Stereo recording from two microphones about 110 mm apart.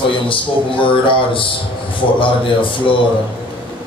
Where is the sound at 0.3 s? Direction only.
50° left (ahead or behind).